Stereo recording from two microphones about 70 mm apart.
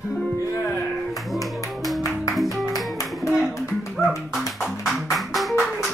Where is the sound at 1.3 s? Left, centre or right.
Centre.